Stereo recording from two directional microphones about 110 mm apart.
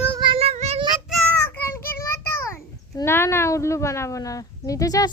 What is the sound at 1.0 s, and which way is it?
Child singing, centre (ahead or behind).